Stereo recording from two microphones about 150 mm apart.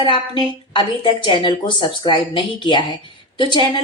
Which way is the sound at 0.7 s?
35° left (ahead or behind).